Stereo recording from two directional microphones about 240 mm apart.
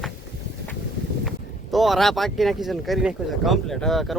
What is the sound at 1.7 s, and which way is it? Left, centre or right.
Speech, centre.